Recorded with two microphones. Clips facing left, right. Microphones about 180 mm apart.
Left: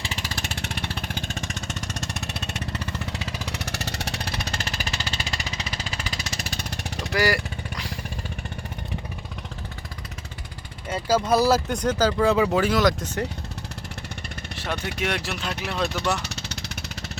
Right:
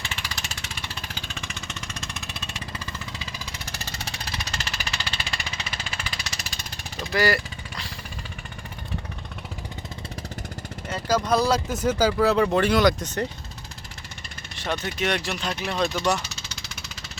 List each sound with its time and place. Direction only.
0.0 s vehicle: 40° left (ahead or behind)
2.6 s jackhammer: 65° left (ahead or behind)
10.8 s speech: 10° left (ahead or behind)
14.5 s vehicle: 5° left (ahead or behind)
14.9 s speech: 5° left (ahead or behind)
16.3 s vehicle: 65° left (ahead or behind)